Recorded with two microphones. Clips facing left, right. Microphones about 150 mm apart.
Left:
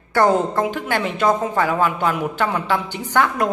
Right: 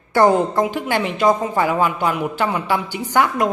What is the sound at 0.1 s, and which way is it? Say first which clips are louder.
A man's voice: right 2 dB; 15° right (ahead or behind).